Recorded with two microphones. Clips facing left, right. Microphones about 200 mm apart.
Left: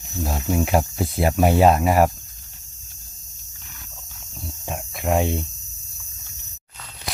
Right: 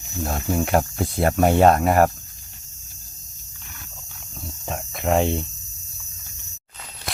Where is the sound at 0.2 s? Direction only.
5° left (ahead or behind).